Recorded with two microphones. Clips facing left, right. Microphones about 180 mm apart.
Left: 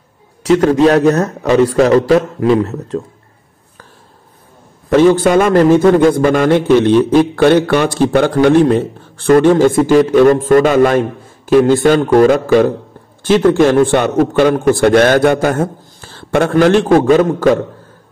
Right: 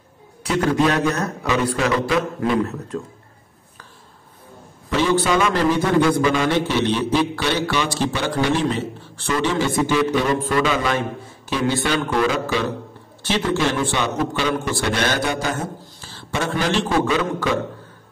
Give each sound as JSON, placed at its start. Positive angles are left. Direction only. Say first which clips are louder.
{"t": 0.7, "sound": "a man's voice", "louder": "left 8 dB", "side_deg": 40}
{"t": 4.8, "sound": "a man's voice", "louder": "left 10 dB", "side_deg": 50}